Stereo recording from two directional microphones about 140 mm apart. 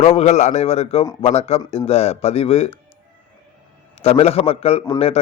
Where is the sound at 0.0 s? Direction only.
50° left (ahead or behind).